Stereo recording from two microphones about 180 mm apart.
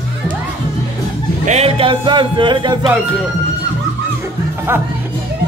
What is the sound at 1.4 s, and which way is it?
Speech, 40° right (ahead or behind).